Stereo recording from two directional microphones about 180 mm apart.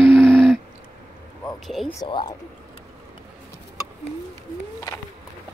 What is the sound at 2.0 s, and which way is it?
Speech, 25° left (ahead or behind).